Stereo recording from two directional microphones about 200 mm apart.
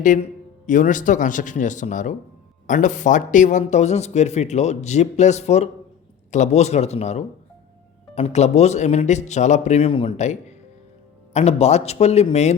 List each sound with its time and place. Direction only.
0.0 s speech: 40° left (ahead or behind)
11.3 s speech: 35° left (ahead or behind)